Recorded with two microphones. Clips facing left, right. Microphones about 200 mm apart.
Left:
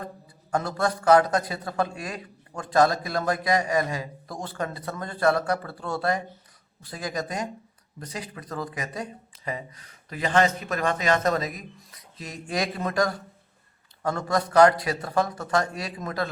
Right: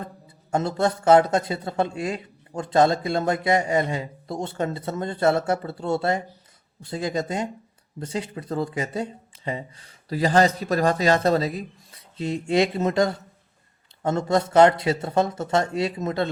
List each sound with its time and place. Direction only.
0.5 s a man's voice: 25° right (ahead or behind)